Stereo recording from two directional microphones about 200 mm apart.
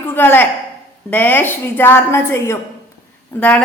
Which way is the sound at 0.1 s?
10° left (ahead or behind).